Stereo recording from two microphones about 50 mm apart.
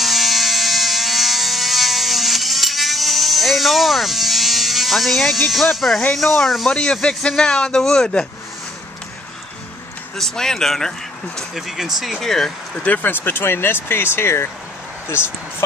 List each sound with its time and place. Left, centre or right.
0.0 s electric toothbrush: centre
5.5 s speech: centre
6.7 s a man's voice: centre
10.1 s a man's voice: centre
11.5 s speech: centre
12.7 s speech: left